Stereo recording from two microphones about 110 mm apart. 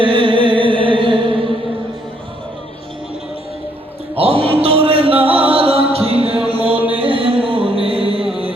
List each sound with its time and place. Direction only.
0.0 s music: 50° right (ahead or behind)
4.2 s a sound: 60° right (ahead or behind)
5.5 s chant: 60° right (ahead or behind)
6.9 s music: 55° right (ahead or behind)